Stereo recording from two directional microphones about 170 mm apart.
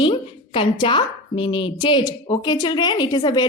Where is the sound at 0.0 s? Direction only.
30° left (ahead or behind).